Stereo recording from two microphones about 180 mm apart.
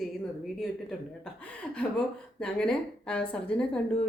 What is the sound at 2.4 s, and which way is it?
Speech, 5° left (ahead or behind).